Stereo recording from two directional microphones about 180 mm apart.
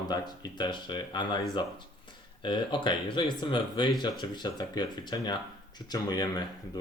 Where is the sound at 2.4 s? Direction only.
25° left (ahead or behind).